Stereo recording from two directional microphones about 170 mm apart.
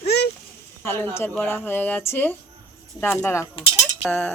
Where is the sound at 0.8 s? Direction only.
15° left (ahead or behind).